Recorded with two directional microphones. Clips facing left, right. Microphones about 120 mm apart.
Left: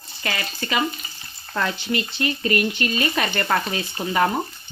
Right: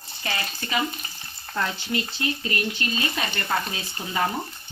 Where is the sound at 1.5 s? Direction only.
75° left (ahead or behind).